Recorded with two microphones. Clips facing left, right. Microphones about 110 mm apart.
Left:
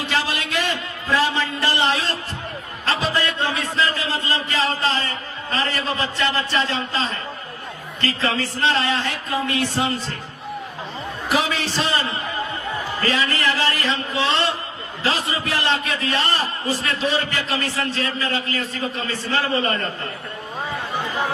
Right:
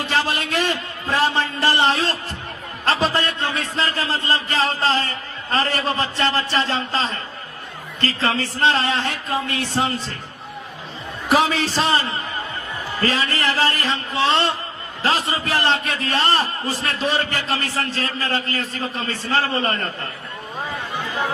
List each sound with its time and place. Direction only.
0.0 s a man's voice: 40° right (ahead or behind)
6.0 s a man's voice: 45° right (ahead or behind)
11.3 s a man's voice: 40° right (ahead or behind)
20.9 s a sound: 20° left (ahead or behind)